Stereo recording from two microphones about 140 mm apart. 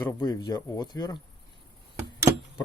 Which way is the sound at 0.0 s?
30° left (ahead or behind).